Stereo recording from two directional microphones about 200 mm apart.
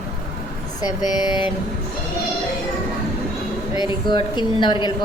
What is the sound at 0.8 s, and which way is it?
Speech, 20° left (ahead or behind).